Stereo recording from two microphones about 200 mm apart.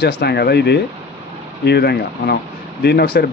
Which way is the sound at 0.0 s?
55° left (ahead or behind).